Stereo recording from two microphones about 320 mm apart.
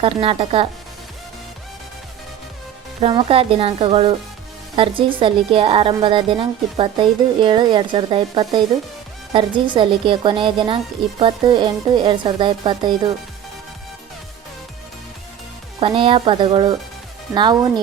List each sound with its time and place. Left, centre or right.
0.0 s a woman's voice: centre
3.0 s a woman's voice: centre
15.8 s a woman's voice: centre